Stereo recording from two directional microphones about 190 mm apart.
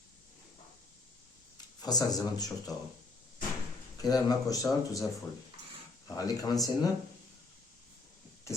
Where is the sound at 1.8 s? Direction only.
20° left (ahead or behind).